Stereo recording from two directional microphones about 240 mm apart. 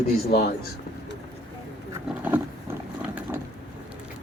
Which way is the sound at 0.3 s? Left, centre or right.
Left.